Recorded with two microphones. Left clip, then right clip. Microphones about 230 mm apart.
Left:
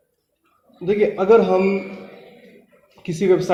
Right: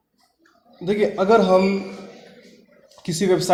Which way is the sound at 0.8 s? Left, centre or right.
Right.